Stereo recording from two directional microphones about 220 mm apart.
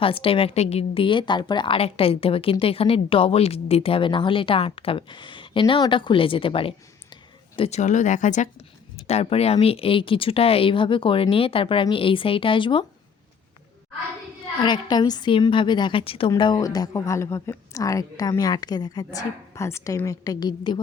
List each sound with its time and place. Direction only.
0.0 s a woman's voice: 25° left (ahead or behind)
14.6 s a woman's voice: 20° left (ahead or behind)